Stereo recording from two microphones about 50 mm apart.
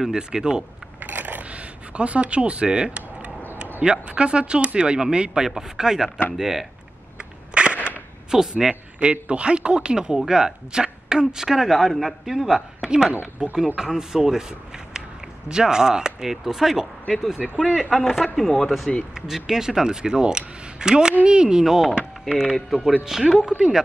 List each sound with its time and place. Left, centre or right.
0.1 s speech: centre
0.9 s a sound: right
3.8 s speech: centre
7.5 s cap gun: right
8.3 s speech: centre
9.0 s speech: right; by 17.4 s centre
17.4 s speech: centre
18.2 s speech: centre